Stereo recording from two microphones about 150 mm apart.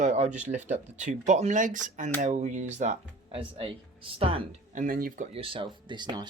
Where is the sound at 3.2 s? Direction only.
35° right (ahead or behind).